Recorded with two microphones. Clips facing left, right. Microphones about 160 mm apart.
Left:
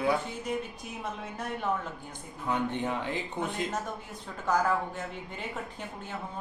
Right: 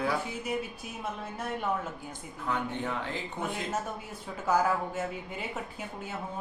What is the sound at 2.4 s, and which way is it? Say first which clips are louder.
Speech: left 2 dB; 20° left (ahead or behind).